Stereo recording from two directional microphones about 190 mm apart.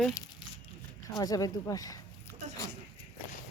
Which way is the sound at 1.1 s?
20° left (ahead or behind).